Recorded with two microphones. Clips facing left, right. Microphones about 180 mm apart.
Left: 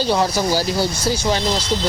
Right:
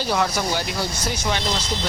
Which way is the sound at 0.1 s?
30° left (ahead or behind).